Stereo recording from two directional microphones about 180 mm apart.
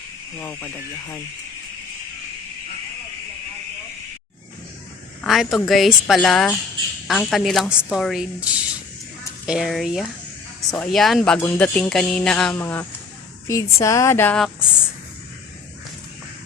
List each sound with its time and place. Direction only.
0.3 s speech: 10° left (ahead or behind)
5.2 s a woman's voice: centre (ahead or behind)